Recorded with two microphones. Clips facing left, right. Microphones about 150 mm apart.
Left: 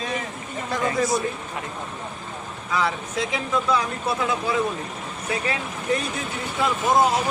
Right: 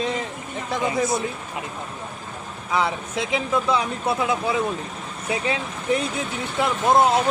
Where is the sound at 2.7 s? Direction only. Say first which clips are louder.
Right 1 dB; 20° right (ahead or behind).